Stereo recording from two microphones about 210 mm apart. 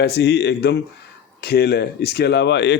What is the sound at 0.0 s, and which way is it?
Speech, 55° left (ahead or behind).